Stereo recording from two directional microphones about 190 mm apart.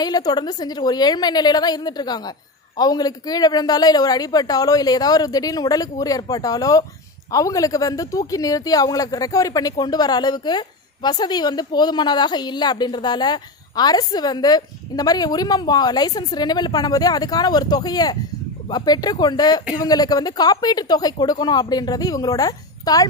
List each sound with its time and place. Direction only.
0.0 s speech: 20° left (ahead or behind)